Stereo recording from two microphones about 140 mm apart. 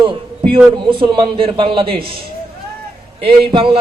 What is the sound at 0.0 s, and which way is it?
A man's voice, 35° right (ahead or behind).